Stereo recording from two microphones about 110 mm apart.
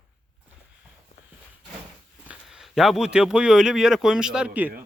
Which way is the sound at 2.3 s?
5° right (ahead or behind).